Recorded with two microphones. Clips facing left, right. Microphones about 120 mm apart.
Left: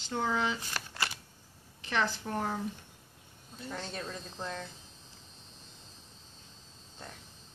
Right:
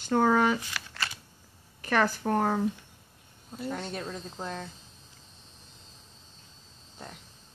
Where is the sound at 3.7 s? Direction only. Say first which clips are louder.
Right 2 dB; 10° right (ahead or behind).